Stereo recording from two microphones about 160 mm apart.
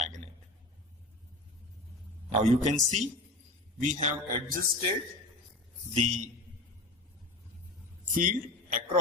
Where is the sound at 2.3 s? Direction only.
45° right (ahead or behind).